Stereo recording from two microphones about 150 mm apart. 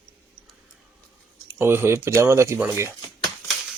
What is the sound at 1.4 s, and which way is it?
Speech, 15° right (ahead or behind).